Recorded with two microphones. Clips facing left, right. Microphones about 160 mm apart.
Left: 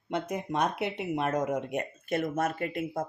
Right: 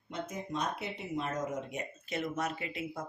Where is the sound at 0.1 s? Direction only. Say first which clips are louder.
Left 7 dB; 65° left (ahead or behind).